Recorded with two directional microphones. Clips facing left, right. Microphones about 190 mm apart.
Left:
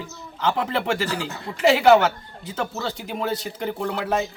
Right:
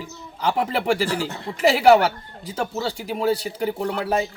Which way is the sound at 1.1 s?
25° right (ahead or behind).